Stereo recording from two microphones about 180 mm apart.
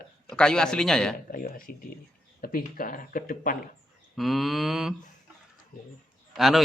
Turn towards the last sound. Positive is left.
turn(degrees=0)  # may be behind; listen again after turning